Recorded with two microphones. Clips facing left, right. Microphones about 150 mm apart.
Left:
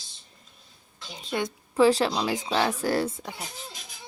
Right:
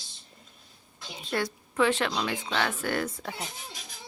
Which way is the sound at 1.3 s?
15° left (ahead or behind).